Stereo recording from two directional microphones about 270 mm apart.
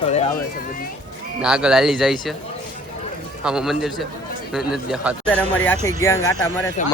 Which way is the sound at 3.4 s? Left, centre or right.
Centre.